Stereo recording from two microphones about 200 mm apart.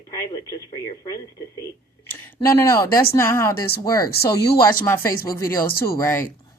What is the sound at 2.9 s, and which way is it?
Speech, 50° left (ahead or behind).